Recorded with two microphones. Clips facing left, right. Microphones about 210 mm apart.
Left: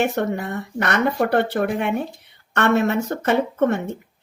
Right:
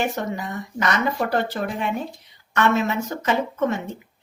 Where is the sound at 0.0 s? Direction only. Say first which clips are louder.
Left 4 dB; 60° left (ahead or behind).